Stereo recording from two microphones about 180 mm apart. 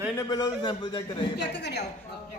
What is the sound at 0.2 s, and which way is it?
Speech, 25° left (ahead or behind).